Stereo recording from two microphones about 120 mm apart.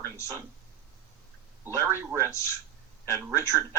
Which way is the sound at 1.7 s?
25° right (ahead or behind).